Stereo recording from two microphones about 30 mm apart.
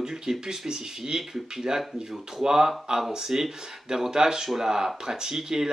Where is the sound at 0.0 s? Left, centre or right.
Centre.